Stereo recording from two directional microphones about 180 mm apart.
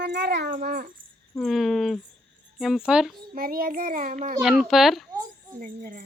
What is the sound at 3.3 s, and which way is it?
Child singing, 55° right (ahead or behind).